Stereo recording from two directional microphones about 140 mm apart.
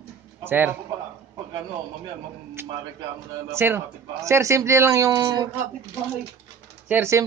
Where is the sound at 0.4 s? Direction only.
15° right (ahead or behind).